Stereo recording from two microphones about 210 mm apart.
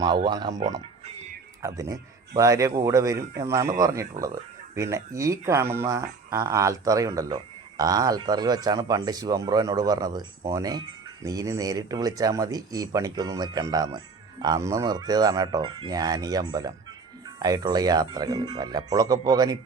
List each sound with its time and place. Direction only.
0.3 s speech: 20° right (ahead or behind)
1.6 s speech: 15° right (ahead or behind)